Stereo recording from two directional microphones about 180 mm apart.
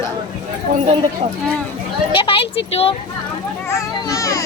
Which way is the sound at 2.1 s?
30° left (ahead or behind).